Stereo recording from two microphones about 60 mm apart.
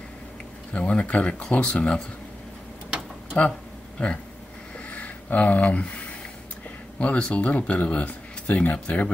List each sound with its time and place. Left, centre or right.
0.7 s speech: centre
4.0 s speech: left
4.7 s a sound: left
7.0 s speech: left